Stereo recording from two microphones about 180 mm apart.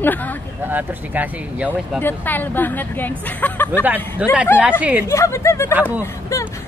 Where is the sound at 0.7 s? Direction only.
10° right (ahead or behind).